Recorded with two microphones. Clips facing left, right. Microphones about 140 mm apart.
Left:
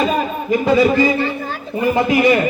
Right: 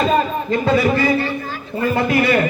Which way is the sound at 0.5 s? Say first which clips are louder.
Left 3 dB; 15° left (ahead or behind).